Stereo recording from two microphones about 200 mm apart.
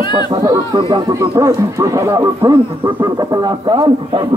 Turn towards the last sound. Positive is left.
turn(degrees=-25)  # may be behind; listen again after turning